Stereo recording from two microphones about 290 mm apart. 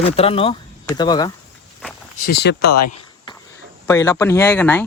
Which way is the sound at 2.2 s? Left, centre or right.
Left.